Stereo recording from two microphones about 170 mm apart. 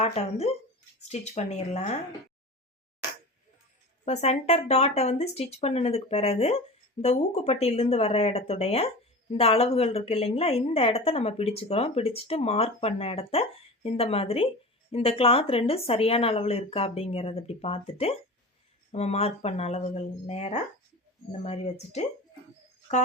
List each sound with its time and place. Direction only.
0.0 s a woman's voice: 40° left (ahead or behind)
4.0 s a woman's voice: 40° left (ahead or behind)